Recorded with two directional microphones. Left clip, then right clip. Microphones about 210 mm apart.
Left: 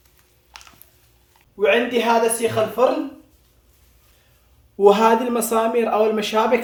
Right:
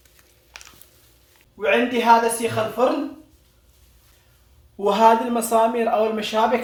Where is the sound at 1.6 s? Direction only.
40° left (ahead or behind).